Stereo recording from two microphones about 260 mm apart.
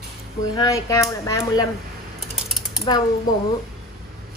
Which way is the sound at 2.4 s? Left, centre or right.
Centre.